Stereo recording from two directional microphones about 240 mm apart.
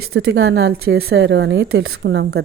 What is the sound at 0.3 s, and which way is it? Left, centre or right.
A woman's voice, right.